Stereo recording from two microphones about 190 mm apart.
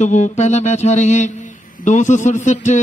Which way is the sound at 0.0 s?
40° left (ahead or behind).